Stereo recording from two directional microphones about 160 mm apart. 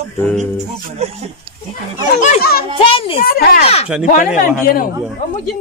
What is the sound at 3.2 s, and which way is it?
Speech, 70° left (ahead or behind).